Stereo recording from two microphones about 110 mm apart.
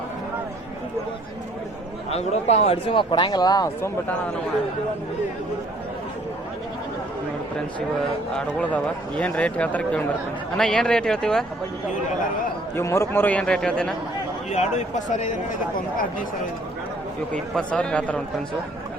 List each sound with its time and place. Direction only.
2.0 s speech: 75° left (ahead or behind)
2.9 s speech: 50° left (ahead or behind)
8.4 s a man's voice: 10° left (ahead or behind)
12.7 s a man's voice: 25° left (ahead or behind); by 13.9 s 5° left (ahead or behind)
14.5 s speech: 90° left
17.3 s a man's voice: 10° left (ahead or behind)